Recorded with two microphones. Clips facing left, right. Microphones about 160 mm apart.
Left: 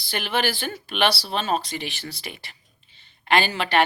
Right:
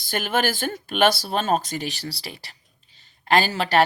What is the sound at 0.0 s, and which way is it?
Speech, 45° right (ahead or behind).